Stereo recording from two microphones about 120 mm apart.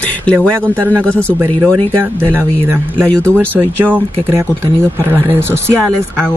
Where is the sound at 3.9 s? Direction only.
20° right (ahead or behind).